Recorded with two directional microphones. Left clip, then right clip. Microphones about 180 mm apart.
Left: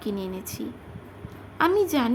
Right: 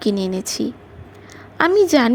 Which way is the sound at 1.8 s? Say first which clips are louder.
Right 9 dB; 35° right (ahead or behind).